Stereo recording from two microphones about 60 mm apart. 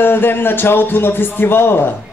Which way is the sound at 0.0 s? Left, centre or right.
Left.